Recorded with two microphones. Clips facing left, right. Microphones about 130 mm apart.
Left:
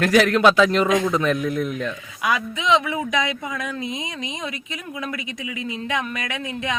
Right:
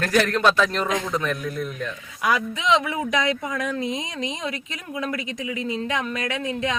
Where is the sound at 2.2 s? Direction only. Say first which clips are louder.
Even; 35° right (ahead or behind).